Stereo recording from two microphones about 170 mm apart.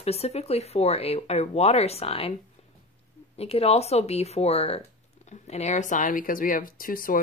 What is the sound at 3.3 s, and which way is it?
Speech, 35° left (ahead or behind).